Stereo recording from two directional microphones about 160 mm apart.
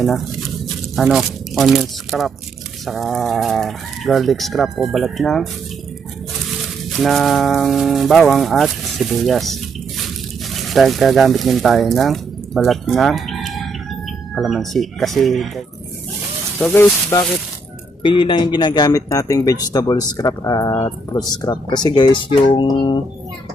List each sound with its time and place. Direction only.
0.0 s speech: centre (ahead or behind)
6.9 s speech: centre (ahead or behind)
16.6 s speech: 10° left (ahead or behind)
18.0 s speech: 30° left (ahead or behind)